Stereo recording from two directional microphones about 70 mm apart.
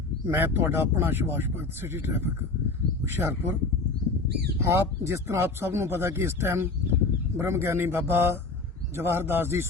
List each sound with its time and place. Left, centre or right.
0.3 s speech: right
4.6 s speech: right